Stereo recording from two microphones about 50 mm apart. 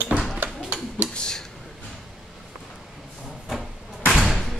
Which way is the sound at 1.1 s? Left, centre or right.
Centre.